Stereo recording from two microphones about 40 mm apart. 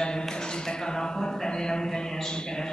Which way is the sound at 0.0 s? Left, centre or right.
Centre.